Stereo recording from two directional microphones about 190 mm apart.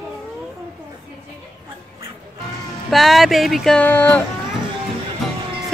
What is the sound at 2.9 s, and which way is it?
Music, centre (ahead or behind).